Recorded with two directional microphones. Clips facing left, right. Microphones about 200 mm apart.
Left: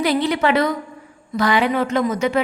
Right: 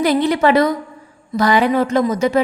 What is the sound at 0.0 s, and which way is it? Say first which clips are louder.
A woman's voice: right 4 dB; 45° right (ahead or behind).